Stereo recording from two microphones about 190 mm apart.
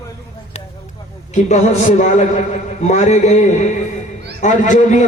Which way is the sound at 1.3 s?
35° left (ahead or behind).